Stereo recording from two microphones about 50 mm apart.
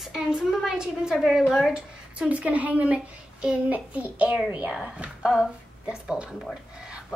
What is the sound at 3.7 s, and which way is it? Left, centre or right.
Child singing, right.